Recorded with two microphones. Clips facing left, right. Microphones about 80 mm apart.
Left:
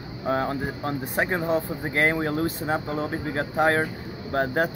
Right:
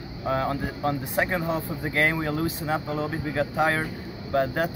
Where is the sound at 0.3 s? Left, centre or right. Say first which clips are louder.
Left 1 dB; left.